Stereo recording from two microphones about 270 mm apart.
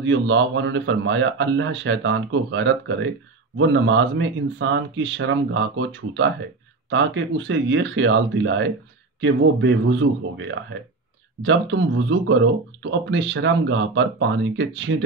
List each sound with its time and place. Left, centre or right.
0.0 s a man's voice: right